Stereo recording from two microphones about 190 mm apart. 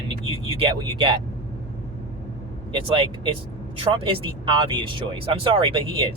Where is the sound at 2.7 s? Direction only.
25° right (ahead or behind).